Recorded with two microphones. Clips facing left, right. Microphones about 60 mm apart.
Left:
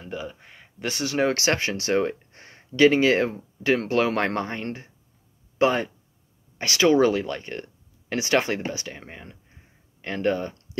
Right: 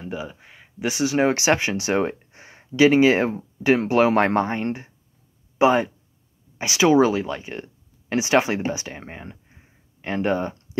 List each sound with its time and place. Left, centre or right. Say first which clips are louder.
0.0 s speech: right 2 dB; centre